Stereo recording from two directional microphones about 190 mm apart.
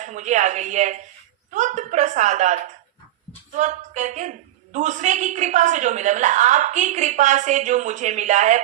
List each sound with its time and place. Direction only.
0.0 s a woman's voice: 40° right (ahead or behind)
3.6 s a woman's voice: 40° right (ahead or behind)